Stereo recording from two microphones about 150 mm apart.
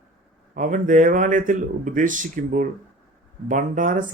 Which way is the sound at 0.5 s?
60° right (ahead or behind).